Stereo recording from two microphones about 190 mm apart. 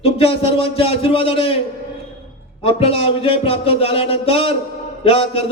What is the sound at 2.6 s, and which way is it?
A man's voice, 30° left (ahead or behind).